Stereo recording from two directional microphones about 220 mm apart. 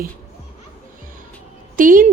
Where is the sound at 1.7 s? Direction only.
40° right (ahead or behind).